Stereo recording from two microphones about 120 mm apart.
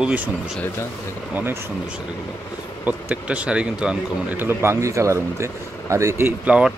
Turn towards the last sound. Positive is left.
turn(degrees=-10)  # may be behind; listen again after turning